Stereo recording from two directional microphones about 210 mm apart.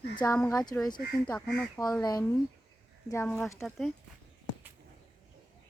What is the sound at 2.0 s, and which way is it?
Speech, 20° left (ahead or behind).